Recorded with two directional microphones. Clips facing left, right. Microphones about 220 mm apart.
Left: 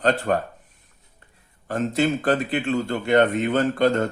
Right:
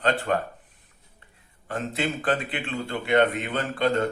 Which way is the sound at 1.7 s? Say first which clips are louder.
Left 7 dB; 45° left (ahead or behind).